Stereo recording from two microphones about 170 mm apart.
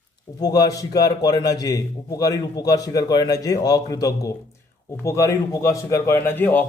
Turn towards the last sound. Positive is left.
turn(degrees=10)  # may be behind; listen again after turning